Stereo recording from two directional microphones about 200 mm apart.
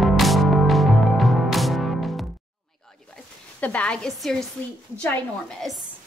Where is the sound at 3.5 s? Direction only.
5° left (ahead or behind).